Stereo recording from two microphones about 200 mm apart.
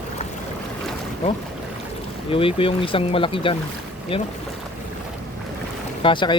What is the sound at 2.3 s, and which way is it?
Speech, 25° left (ahead or behind).